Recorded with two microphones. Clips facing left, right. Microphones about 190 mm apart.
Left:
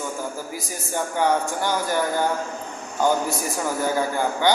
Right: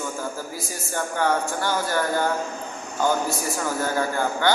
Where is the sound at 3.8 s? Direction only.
15° left (ahead or behind).